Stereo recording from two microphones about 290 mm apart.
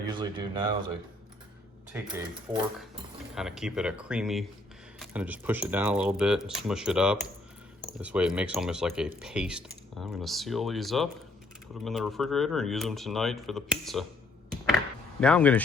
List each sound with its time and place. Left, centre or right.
0.1 s speech: centre
1.9 s speech: centre
15.2 s speech: centre